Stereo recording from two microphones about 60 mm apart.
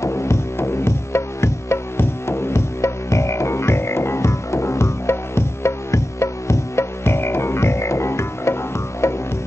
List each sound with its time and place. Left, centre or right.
0.0 s music: left